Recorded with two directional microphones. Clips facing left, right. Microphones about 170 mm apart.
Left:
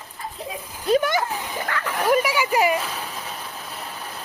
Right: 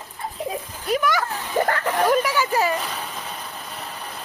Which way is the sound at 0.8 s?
25° left (ahead or behind).